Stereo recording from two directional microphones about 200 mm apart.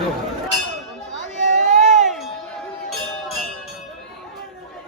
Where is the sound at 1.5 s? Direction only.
35° right (ahead or behind).